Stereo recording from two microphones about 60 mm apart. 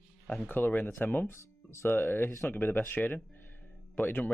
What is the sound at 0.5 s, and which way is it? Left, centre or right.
Speech, left.